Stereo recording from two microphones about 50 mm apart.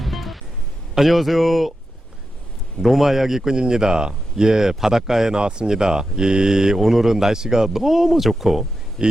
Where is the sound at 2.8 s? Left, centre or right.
Centre.